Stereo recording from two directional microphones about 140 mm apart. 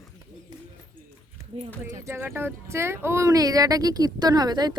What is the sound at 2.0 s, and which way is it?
Speech, 20° right (ahead or behind).